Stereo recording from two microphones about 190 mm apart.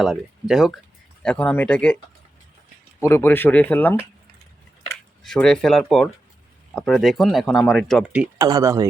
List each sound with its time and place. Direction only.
0.0 s speech: centre (ahead or behind)
3.0 s speech: 15° left (ahead or behind)
5.2 s speech: 5° left (ahead or behind)
8.4 s speech: 20° right (ahead or behind)